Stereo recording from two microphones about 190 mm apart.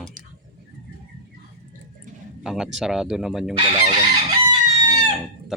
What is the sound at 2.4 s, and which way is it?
Speech, centre (ahead or behind).